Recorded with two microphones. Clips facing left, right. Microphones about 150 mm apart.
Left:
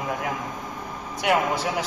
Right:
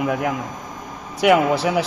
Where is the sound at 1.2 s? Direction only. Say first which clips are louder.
Right 7 dB; 90° right.